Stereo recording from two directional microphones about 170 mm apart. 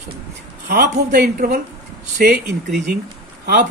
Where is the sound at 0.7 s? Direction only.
70° right (ahead or behind).